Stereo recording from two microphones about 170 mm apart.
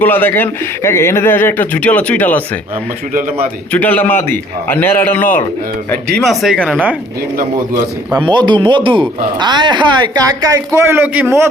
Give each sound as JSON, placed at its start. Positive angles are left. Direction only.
{"t": 0.0, "sound": "speech", "side_deg": 10}
{"t": 3.7, "sound": "speech", "side_deg": 10}
{"t": 8.2, "sound": "speech", "side_deg": -25}